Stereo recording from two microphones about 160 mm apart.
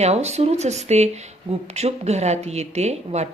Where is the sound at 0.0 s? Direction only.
40° right (ahead or behind).